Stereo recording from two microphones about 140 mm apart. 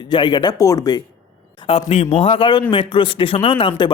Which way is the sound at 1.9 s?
50° left (ahead or behind).